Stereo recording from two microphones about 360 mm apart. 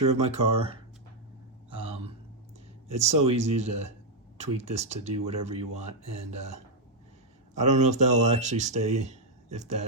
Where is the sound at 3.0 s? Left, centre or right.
Centre.